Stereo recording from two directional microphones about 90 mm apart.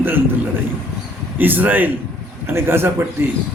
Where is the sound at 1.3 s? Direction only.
20° right (ahead or behind).